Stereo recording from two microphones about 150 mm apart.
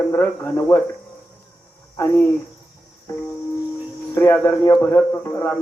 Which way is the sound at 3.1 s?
20° left (ahead or behind).